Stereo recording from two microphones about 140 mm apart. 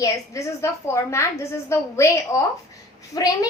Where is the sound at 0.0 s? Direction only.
20° left (ahead or behind).